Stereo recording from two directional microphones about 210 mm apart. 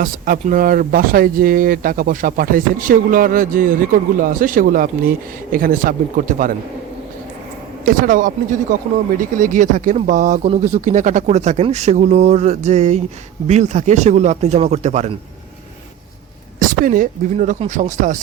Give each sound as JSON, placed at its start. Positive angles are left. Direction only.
{"t": 0.0, "sound": "speech", "side_deg": -40}
{"t": 7.9, "sound": "speech", "side_deg": -40}
{"t": 16.6, "sound": "speech", "side_deg": -40}